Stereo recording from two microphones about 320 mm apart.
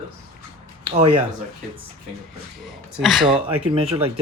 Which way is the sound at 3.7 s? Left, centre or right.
Centre.